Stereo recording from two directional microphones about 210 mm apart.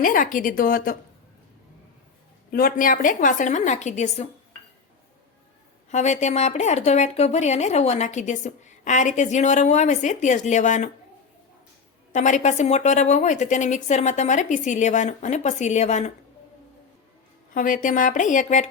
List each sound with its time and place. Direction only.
0.0 s speech: 40° left (ahead or behind)
2.5 s speech: 45° left (ahead or behind)
5.9 s speech: 35° left (ahead or behind)
12.1 s speech: 35° left (ahead or behind)
17.5 s speech: 40° left (ahead or behind)